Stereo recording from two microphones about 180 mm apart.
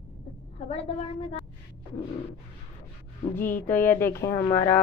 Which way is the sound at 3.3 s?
10° left (ahead or behind).